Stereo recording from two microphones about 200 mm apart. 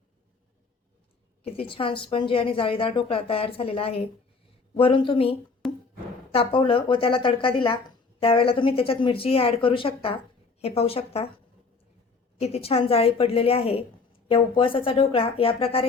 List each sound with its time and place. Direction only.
1.5 s speech: 25° left (ahead or behind)
5.6 s music: centre (ahead or behind)
6.3 s speech: 25° left (ahead or behind)
12.4 s speech: 30° left (ahead or behind)